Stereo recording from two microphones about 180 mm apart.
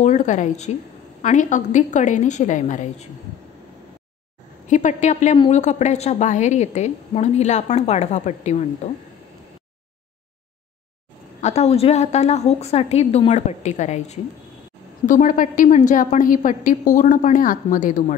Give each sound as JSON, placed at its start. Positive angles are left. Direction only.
{"t": 0.0, "sound": "a woman's voice", "side_deg": 40}
{"t": 4.6, "sound": "a woman's voice", "side_deg": 40}
{"t": 11.4, "sound": "a woman's voice", "side_deg": 35}